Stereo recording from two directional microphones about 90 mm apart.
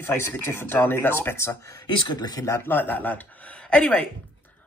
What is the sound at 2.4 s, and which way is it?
Speech, 25° left (ahead or behind).